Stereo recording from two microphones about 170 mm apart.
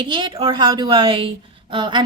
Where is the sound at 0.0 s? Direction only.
25° right (ahead or behind).